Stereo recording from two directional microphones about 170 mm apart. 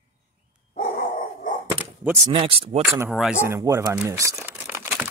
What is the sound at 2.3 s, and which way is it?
Speech, 35° right (ahead or behind).